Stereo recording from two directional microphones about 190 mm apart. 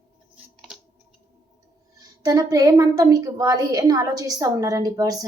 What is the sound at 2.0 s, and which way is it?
A woman's voice, 20° right (ahead or behind).